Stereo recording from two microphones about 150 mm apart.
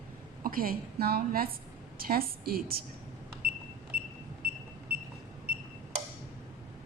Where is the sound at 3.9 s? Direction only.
90° right.